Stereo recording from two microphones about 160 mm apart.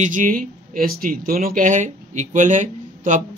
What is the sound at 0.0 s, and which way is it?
Speech, 55° right (ahead or behind).